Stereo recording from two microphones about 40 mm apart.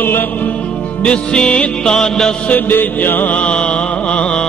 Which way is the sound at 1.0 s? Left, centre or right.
Left.